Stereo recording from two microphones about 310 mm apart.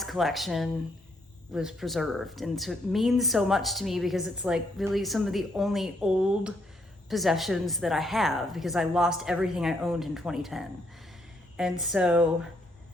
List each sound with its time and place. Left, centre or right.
0.0 s speech: centre